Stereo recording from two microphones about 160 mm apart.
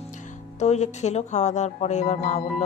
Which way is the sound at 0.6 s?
45° left (ahead or behind).